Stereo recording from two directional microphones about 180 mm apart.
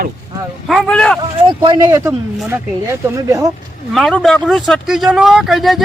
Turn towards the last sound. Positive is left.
turn(degrees=0)  # may be behind; listen again after turning